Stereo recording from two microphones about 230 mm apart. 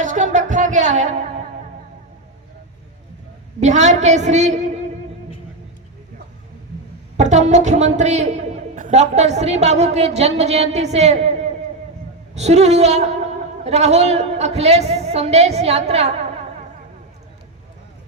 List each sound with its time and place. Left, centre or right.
0.0 s music: right
3.6 s a woman's voice: right
7.2 s a man's voice: right
12.3 s a man's voice: right